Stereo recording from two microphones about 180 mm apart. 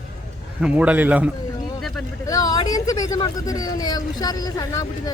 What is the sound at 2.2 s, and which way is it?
Speech, 20° left (ahead or behind).